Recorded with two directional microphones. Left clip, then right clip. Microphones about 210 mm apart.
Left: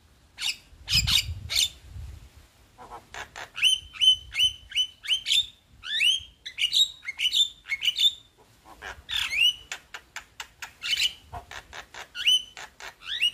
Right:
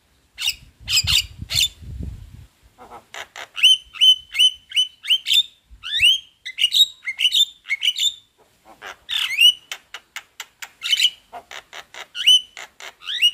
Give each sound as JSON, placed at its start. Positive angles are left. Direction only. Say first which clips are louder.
{"t": 0.4, "sound": "squawk", "louder": "right 6 dB", "side_deg": -20}
{"t": 2.8, "sound": "a sound", "louder": "right 4 dB", "side_deg": -20}
{"t": 3.9, "sound": "bird", "louder": "right 7 dB", "side_deg": -20}
{"t": 8.7, "sound": "pig", "louder": "right 6 dB", "side_deg": -20}
{"t": 9.7, "sound": "bird", "louder": "right 5 dB", "side_deg": -20}
{"t": 12.5, "sound": "a sound", "louder": "right 5 dB", "side_deg": -20}